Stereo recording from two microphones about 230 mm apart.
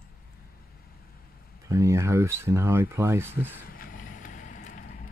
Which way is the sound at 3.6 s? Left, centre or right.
Left.